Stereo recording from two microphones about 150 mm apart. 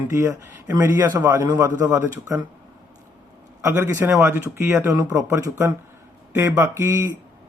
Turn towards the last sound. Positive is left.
turn(degrees=-20)  # may be behind; listen again after turning